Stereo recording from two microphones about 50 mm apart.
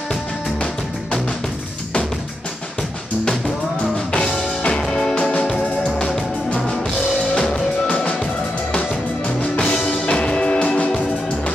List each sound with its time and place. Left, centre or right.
4.1 s music: left
7.3 s music: centre
9.4 s music: left